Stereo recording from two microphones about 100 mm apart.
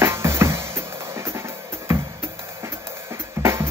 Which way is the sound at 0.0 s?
25° right (ahead or behind).